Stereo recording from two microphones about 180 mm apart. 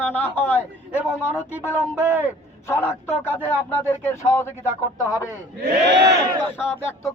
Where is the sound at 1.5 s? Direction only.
10° right (ahead or behind).